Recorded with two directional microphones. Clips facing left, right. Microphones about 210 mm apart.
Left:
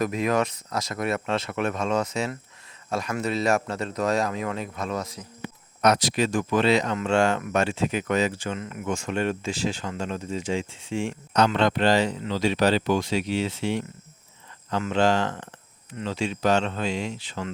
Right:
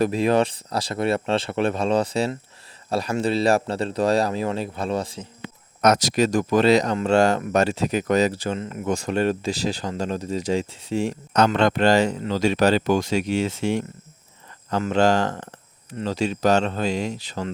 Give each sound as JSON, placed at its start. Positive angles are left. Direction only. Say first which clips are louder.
{"t": 0.0, "sound": "speech", "louder": "right 4 dB", "side_deg": -30}
{"t": 5.8, "sound": "speech", "louder": "right 3 dB", "side_deg": -45}